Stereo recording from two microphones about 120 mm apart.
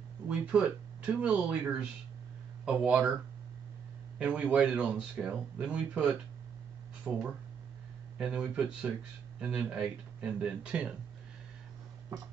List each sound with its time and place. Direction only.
0.3 s speech: 10° right (ahead or behind)
4.2 s speech: 10° right (ahead or behind)